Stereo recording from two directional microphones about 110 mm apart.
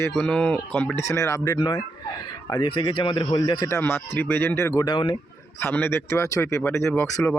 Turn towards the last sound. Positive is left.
turn(degrees=20)  # may be behind; listen again after turning